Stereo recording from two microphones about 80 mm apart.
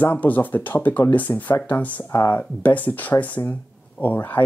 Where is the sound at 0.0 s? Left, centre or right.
Left.